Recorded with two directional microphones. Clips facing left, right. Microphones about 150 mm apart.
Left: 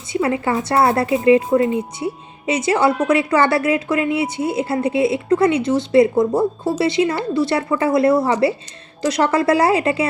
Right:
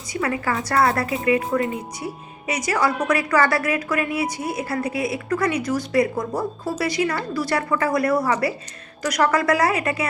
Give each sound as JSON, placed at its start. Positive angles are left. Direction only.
{"t": 0.1, "sound": "a woman's voice", "side_deg": 25}